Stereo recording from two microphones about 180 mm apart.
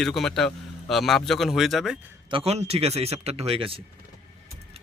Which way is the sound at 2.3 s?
30° right (ahead or behind).